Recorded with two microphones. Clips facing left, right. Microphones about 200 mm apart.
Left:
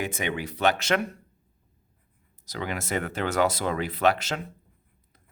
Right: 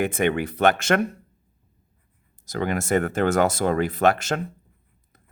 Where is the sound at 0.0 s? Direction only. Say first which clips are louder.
Right 8 dB; 55° right (ahead or behind).